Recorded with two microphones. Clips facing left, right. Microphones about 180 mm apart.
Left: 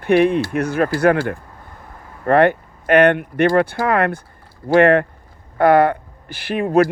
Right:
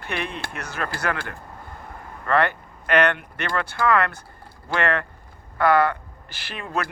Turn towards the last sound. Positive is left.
turn(degrees=55)  # may be behind; listen again after turning